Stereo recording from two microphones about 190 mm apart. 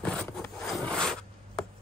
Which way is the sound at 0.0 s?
5° left (ahead or behind).